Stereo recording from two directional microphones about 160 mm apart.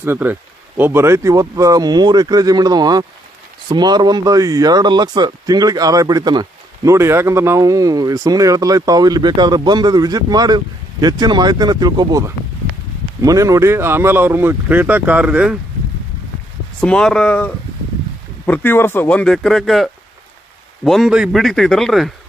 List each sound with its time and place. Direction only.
0.0 s speech: 15° right (ahead or behind)
16.8 s a man's voice: 5° left (ahead or behind)